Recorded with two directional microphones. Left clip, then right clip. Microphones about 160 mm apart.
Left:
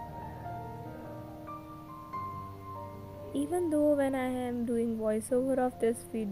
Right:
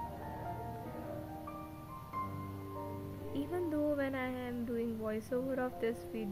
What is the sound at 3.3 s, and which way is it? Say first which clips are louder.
A woman's voice: left 7 dB; 30° left (ahead or behind).